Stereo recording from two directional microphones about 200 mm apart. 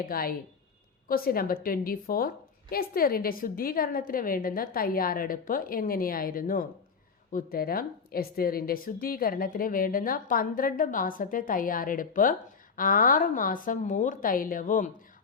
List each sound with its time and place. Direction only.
0.0 s a woman's voice: 45° left (ahead or behind)